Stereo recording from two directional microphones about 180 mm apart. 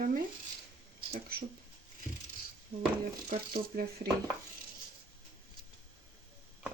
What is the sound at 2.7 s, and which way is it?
Speech, 60° right (ahead or behind).